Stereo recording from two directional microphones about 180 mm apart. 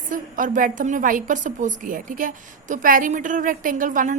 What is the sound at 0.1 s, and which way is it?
A woman's voice, 45° right (ahead or behind).